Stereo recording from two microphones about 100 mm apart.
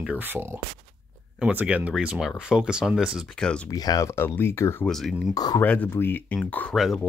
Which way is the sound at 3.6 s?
35° left (ahead or behind).